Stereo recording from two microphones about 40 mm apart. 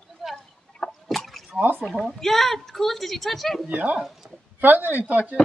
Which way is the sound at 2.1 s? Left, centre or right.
Centre.